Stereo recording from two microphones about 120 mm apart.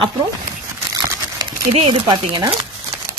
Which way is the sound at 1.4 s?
40° right (ahead or behind).